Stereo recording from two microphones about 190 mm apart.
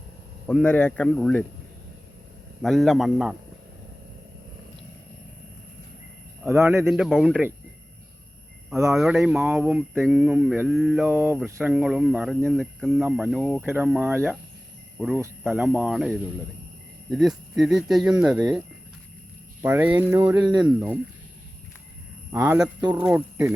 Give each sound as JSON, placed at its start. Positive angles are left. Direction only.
{"t": 0.4, "sound": "speech", "side_deg": 5}
{"t": 2.6, "sound": "speech", "side_deg": 0}
{"t": 6.4, "sound": "speech", "side_deg": -10}
{"t": 6.8, "sound": "speech", "side_deg": 0}
{"t": 8.9, "sound": "speech", "side_deg": 0}
{"t": 19.6, "sound": "speech", "side_deg": -10}
{"t": 22.3, "sound": "speech", "side_deg": -10}
{"t": 22.8, "sound": "speech", "side_deg": -20}
{"t": 23.0, "sound": "speech", "side_deg": -5}